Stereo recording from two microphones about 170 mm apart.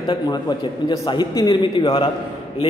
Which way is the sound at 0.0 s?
25° left (ahead or behind).